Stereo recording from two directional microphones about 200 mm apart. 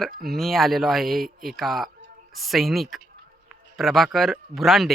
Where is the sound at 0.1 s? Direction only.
50° right (ahead or behind).